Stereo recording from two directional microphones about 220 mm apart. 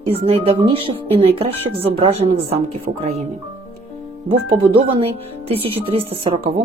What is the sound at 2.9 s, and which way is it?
Speech, 40° right (ahead or behind).